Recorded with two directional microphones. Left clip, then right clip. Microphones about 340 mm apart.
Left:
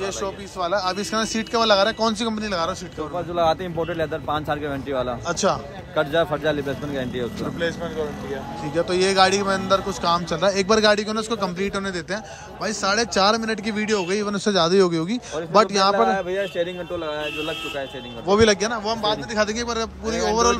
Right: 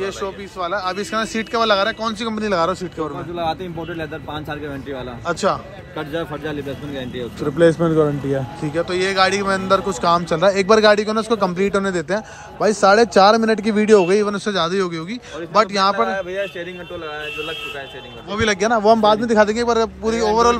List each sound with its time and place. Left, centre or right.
0.0 s a man's voice: centre
8.7 s a man's voice: centre
16.1 s a man's voice: left
18.3 s a man's voice: centre